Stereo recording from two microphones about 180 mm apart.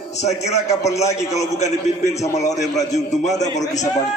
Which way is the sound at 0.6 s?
40° left (ahead or behind).